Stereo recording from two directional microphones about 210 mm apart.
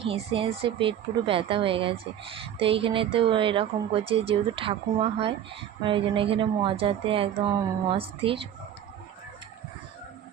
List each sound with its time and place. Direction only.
0.1 s speech: 25° right (ahead or behind)